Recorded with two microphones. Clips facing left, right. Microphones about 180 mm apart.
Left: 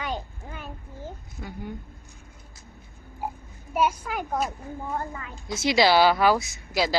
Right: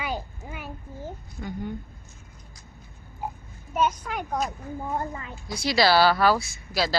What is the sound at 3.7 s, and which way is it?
Speech, 10° left (ahead or behind).